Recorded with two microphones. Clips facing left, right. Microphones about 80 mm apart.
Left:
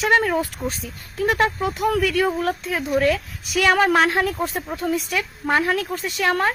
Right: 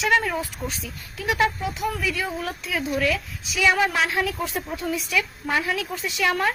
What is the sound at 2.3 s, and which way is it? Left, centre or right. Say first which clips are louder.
A woman's voice: left 6 dB; left.